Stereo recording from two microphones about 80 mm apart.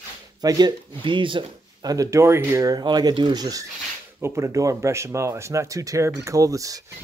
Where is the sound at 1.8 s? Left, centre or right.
Right.